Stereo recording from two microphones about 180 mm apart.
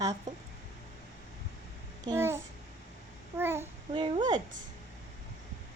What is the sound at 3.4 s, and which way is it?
Speech, 15° right (ahead or behind).